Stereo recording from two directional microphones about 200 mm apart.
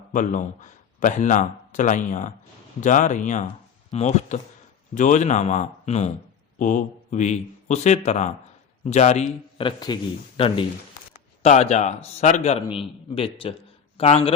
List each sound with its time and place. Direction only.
0.1 s a man's voice: 40° left (ahead or behind)